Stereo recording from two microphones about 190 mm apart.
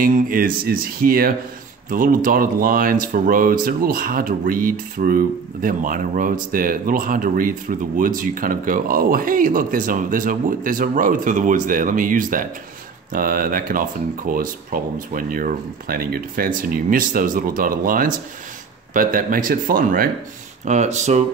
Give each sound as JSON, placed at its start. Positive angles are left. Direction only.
{"t": 0.0, "sound": "speech", "side_deg": -50}
{"t": 20.6, "sound": "speech", "side_deg": -40}